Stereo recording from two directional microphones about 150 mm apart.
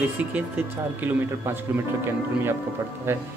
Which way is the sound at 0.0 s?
10° right (ahead or behind).